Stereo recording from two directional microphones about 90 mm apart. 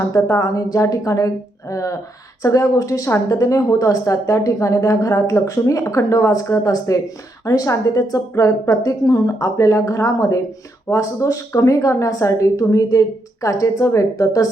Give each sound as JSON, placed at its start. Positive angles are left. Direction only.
{"t": 0.0, "sound": "a woman's voice", "side_deg": 35}